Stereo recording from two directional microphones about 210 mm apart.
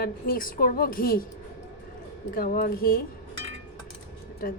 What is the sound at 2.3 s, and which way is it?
Speech, 45° left (ahead or behind).